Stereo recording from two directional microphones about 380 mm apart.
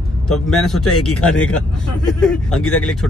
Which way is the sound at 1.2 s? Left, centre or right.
Centre.